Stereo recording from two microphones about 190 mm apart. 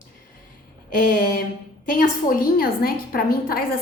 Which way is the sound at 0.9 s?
45° left (ahead or behind).